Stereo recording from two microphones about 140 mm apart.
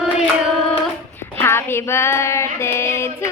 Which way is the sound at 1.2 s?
15° left (ahead or behind).